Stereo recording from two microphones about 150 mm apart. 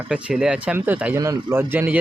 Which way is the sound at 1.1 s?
20° right (ahead or behind).